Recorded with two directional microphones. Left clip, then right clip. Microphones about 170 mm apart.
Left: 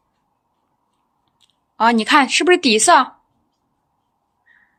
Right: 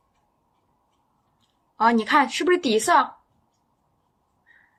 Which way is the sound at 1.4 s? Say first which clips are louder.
Left 4 dB; 55° left (ahead or behind).